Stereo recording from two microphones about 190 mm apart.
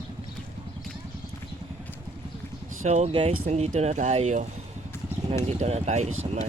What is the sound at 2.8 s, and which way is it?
Speech, 35° right (ahead or behind).